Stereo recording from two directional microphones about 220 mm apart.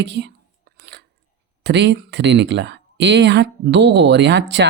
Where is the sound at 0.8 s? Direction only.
50° right (ahead or behind).